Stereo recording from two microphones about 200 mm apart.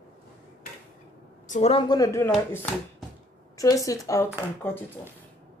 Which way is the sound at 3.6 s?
15° left (ahead or behind).